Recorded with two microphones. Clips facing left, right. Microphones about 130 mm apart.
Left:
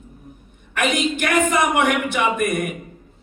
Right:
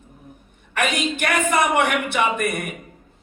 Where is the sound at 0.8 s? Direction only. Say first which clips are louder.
Left 2 dB; 55° right (ahead or behind).